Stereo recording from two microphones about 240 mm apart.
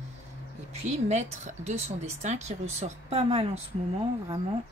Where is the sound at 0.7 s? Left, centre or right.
Right.